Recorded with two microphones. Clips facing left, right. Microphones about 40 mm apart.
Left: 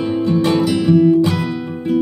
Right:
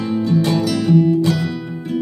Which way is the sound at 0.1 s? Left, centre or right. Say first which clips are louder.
Left 1 dB; left.